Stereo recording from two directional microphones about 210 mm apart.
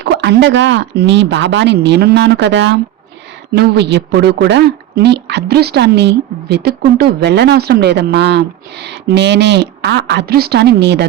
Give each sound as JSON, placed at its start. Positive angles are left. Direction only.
{"t": 0.0, "sound": "speech", "side_deg": -55}